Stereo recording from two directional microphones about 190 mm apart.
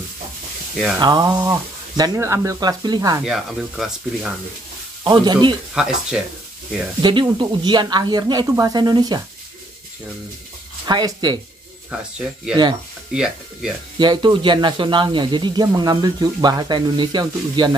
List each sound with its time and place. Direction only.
0.9 s speech: 20° right (ahead or behind)
3.3 s speech: centre (ahead or behind)
5.0 s speech: 25° right (ahead or behind)
5.8 s speech: 5° right (ahead or behind)
7.0 s speech: 25° right (ahead or behind)
10.9 s speech: 20° right (ahead or behind)
13.1 s speech: 5° right (ahead or behind)
13.9 s speech: 25° right (ahead or behind)